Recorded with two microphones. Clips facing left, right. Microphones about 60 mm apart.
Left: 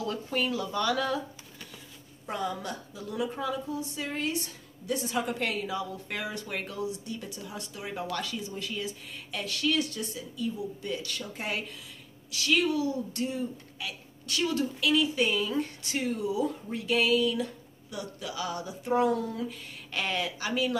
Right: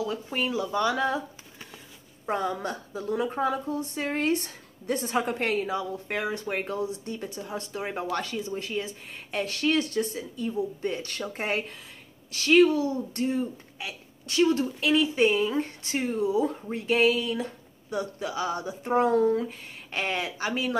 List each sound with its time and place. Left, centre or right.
0.0 s a woman's voice: centre